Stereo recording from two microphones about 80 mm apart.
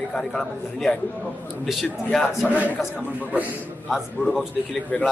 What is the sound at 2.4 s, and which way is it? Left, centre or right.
Speech, centre.